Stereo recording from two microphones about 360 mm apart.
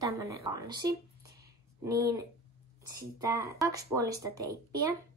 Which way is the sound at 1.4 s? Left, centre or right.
Centre.